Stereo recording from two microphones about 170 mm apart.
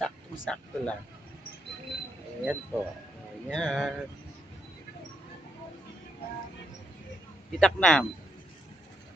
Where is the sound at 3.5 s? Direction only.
5° left (ahead or behind).